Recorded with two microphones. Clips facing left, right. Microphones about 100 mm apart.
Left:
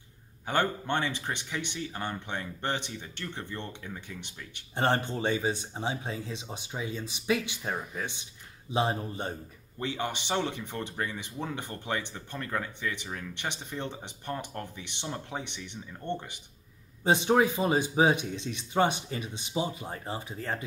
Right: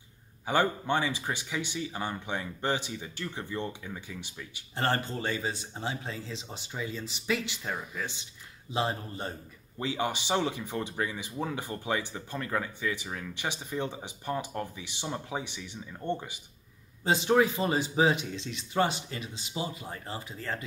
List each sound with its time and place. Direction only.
0.5 s speech: 10° right (ahead or behind)
4.7 s speech: 20° left (ahead or behind)
9.8 s speech: 10° right (ahead or behind)
17.0 s speech: 20° left (ahead or behind)